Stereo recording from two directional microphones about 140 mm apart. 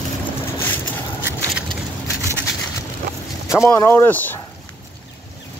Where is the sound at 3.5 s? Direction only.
20° left (ahead or behind).